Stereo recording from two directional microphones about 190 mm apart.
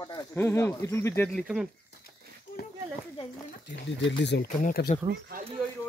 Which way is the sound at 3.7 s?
70° left (ahead or behind).